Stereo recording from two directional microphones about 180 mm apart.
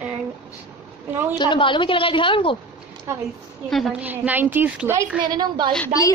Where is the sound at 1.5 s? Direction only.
25° left (ahead or behind).